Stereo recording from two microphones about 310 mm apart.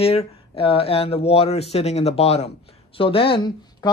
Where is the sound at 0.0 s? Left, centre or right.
Centre.